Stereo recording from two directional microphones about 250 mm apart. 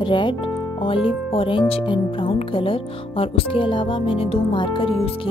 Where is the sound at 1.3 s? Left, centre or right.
Left.